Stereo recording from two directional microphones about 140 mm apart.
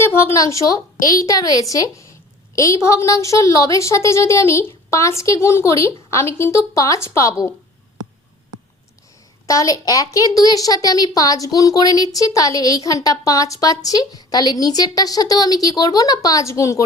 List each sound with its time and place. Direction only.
0.0 s a woman's voice: 15° left (ahead or behind)
9.5 s a woman's voice: 25° left (ahead or behind)